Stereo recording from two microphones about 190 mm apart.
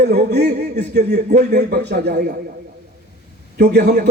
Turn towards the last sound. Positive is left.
turn(degrees=-60)  # may be behind; listen again after turning